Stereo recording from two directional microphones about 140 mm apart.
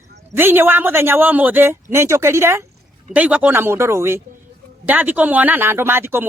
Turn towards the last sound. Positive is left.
turn(degrees=-15)  # may be behind; listen again after turning